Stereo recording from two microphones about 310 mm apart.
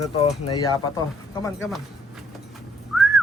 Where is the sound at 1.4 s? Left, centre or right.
Centre.